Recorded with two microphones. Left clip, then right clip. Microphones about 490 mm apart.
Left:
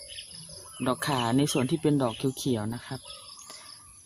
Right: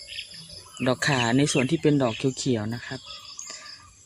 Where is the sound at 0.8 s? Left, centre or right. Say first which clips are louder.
Right 4 dB; left.